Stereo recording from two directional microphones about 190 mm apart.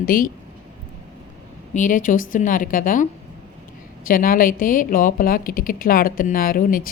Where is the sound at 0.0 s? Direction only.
50° left (ahead or behind).